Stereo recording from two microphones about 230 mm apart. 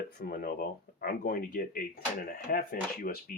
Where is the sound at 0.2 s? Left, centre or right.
Left.